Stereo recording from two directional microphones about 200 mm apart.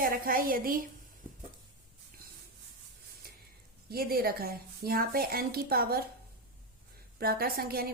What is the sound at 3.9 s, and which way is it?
A woman's voice, 50° right (ahead or behind).